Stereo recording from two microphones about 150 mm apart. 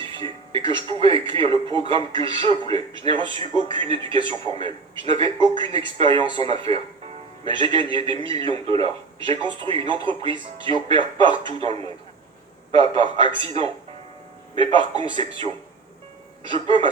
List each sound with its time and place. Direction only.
0.0 s a man's voice: 35° right (ahead or behind)